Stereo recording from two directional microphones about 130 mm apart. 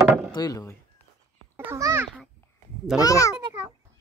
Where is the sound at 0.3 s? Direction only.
30° left (ahead or behind).